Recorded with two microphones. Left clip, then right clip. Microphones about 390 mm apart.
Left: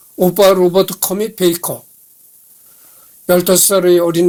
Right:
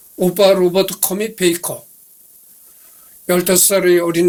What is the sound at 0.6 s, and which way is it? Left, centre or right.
Speech, left.